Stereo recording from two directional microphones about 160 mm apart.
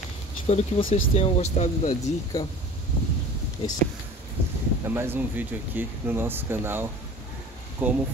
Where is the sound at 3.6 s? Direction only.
40° left (ahead or behind).